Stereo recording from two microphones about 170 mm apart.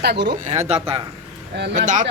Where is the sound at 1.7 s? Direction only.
50° right (ahead or behind).